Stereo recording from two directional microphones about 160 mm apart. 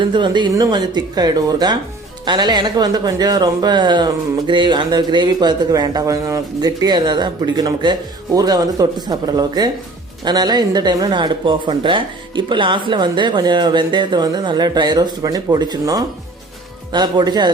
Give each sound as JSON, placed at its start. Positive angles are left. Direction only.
{"t": 0.0, "sound": "speech", "side_deg": -30}